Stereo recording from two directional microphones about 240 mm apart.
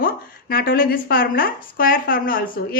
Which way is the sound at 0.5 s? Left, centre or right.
Left.